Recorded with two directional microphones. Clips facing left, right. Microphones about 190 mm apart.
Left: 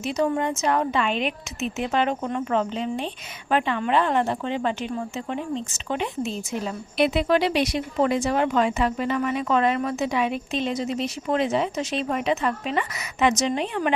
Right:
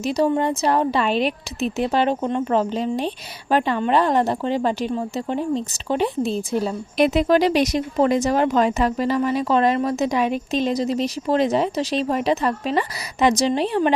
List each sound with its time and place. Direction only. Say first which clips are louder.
0.0 s a woman's voice: right 4 dB; 35° right (ahead or behind)